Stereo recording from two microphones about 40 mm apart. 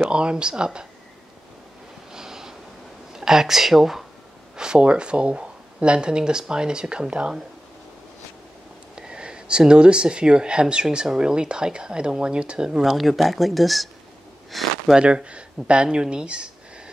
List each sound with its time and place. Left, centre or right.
0.1 s speech: right
2.1 s snort: centre
3.1 s speech: centre
4.6 s speech: right
8.9 s speech: right
12.9 s speech: centre
15.0 s speech: right